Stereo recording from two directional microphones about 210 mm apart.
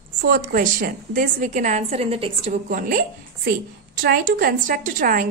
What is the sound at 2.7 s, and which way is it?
A woman's voice, 40° right (ahead or behind).